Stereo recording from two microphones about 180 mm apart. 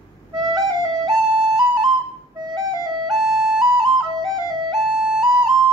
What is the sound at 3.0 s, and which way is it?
Music, centre (ahead or behind).